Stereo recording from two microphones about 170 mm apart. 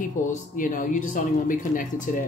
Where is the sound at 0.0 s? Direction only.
50° left (ahead or behind).